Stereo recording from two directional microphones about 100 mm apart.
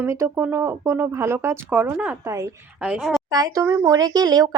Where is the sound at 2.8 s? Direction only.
10° right (ahead or behind).